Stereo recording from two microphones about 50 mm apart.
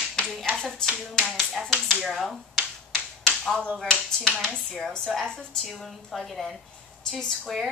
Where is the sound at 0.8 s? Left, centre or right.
Centre.